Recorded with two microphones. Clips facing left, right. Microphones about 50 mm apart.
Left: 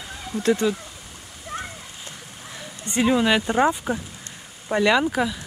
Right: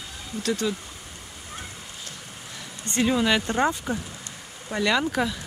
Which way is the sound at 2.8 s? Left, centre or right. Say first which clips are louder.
Left 3 dB; centre.